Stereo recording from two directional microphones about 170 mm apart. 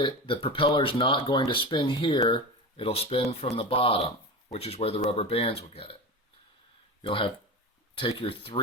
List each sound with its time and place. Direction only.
0.0 s speech: 30° left (ahead or behind)
7.0 s speech: 30° left (ahead or behind)